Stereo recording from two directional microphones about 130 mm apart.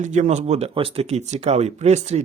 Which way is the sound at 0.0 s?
70° right (ahead or behind).